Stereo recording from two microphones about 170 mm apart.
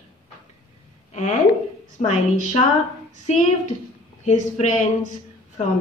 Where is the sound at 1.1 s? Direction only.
40° left (ahead or behind).